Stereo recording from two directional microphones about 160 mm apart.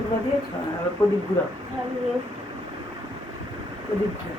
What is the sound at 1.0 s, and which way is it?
Speech, 15° left (ahead or behind).